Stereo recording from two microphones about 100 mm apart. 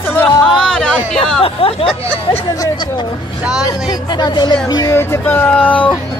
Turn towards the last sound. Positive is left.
turn(degrees=15)  # may be behind; listen again after turning